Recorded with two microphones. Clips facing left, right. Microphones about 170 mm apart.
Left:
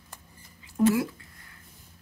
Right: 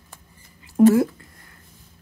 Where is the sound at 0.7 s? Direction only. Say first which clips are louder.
Right 8 dB; 45° right (ahead or behind).